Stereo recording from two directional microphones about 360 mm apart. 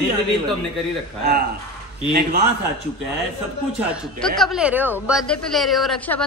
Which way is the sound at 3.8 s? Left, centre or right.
Centre.